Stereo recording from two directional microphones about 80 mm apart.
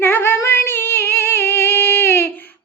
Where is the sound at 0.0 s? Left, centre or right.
Left.